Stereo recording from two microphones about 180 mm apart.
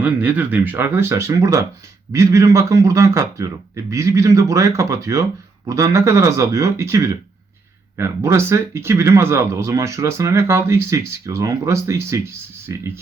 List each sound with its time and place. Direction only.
0.0 s speech: 10° right (ahead or behind)